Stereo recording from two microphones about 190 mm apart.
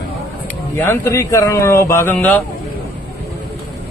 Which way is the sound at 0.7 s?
15° left (ahead or behind).